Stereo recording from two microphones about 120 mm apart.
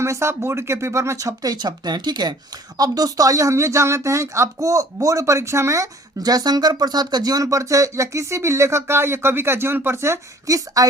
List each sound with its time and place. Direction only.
0.0 s a woman's voice: 25° right (ahead or behind)